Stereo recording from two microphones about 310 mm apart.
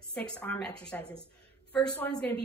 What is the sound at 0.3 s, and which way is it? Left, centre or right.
Speech, centre.